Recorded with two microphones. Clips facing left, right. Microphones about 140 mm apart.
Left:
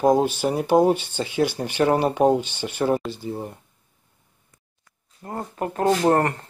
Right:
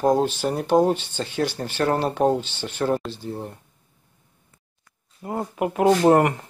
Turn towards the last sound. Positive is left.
turn(degrees=-15)  # may be behind; listen again after turning